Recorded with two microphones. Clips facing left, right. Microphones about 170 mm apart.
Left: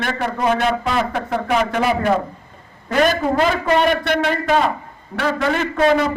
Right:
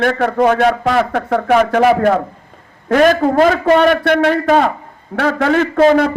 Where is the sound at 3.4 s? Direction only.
60° right (ahead or behind).